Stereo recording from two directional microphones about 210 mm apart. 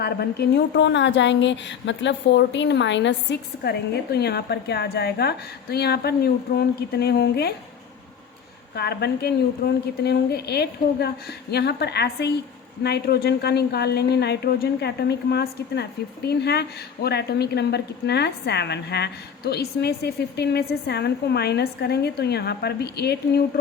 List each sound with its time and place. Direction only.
0.0 s a woman's voice: 50° left (ahead or behind)
8.7 s speech: 50° left (ahead or behind)